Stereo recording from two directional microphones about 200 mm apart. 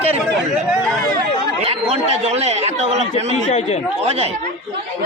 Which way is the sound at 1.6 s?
30° right (ahead or behind).